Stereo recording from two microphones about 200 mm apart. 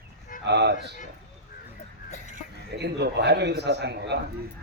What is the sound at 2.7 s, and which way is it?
Speech, 55° right (ahead or behind).